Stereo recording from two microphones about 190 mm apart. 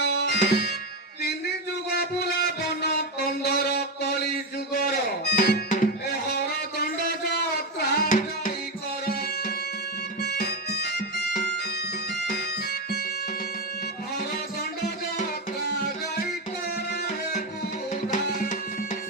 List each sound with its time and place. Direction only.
0.0 s music: 60° left (ahead or behind)
1.9 s a sound: 55° left (ahead or behind)
4.7 s music: 55° left (ahead or behind)
6.1 s a sound: 55° left (ahead or behind)
9.0 s music: 55° left (ahead or behind)
10.2 s bagpipes: 55° left (ahead or behind)
12.3 s music: 55° left (ahead or behind)
16.7 s tabla: 55° left (ahead or behind)